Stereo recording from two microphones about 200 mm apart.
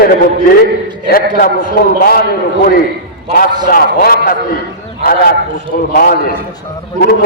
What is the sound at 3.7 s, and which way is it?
A man's voice, 45° left (ahead or behind).